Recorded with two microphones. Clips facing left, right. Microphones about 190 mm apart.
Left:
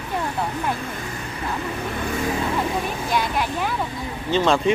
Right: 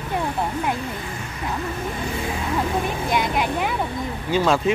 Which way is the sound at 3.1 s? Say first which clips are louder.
Right 1 dB; 20° right (ahead or behind).